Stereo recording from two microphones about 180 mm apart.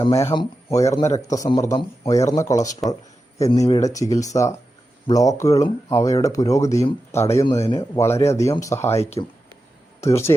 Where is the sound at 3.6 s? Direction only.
20° left (ahead or behind).